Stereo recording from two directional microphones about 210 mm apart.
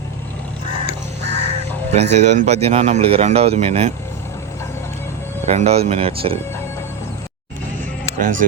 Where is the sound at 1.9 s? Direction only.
30° right (ahead or behind).